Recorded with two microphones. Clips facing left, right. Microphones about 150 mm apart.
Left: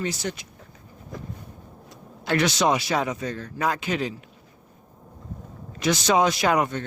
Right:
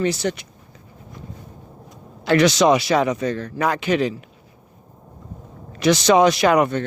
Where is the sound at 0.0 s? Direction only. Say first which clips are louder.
Right 7 dB; 75° right (ahead or behind).